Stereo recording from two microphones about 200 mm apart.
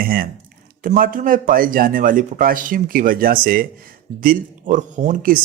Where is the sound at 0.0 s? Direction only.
45° right (ahead or behind).